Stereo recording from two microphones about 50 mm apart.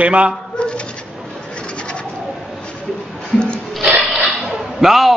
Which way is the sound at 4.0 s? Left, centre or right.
Centre.